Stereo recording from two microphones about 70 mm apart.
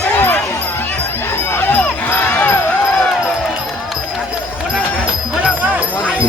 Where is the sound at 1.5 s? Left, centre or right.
Left.